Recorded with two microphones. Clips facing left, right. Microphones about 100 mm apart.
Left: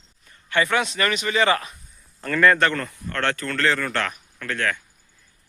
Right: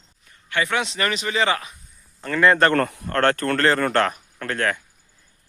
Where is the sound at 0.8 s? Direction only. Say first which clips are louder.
Left 1 dB; 25° right (ahead or behind).